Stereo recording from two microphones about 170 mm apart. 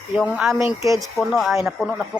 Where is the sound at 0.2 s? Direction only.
Centre (ahead or behind).